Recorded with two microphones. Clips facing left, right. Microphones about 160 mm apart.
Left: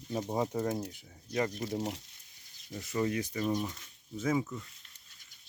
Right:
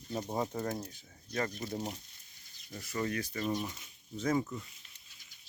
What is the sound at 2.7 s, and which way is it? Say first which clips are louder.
Speech: left 4 dB; 20° left (ahead or behind).